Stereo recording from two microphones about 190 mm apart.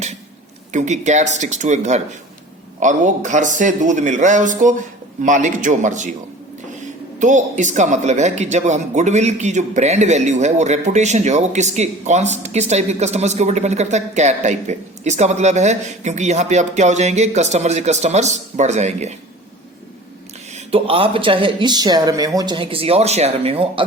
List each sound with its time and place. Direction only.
0.7 s speech: 40° right (ahead or behind)
7.2 s speech: 40° right (ahead or behind)
20.7 s speech: 30° right (ahead or behind)